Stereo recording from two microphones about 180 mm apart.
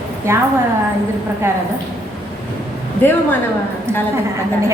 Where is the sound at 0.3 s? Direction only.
15° right (ahead or behind).